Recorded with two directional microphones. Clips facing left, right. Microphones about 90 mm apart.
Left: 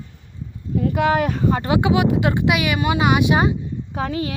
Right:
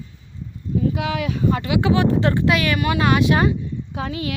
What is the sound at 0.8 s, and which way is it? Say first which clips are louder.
Speech: left 4 dB; 55° left (ahead or behind).